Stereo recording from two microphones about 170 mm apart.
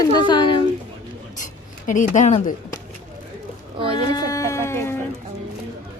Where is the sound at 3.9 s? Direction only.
25° left (ahead or behind).